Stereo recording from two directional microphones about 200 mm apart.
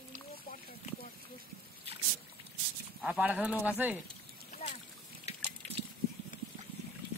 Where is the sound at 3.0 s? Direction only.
5° right (ahead or behind).